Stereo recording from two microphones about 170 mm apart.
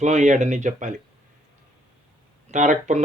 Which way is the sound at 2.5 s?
45° right (ahead or behind).